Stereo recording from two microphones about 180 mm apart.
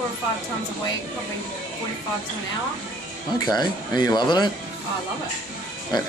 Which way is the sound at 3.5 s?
25° left (ahead or behind).